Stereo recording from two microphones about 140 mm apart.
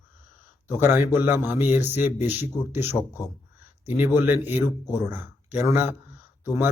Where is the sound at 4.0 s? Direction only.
15° right (ahead or behind).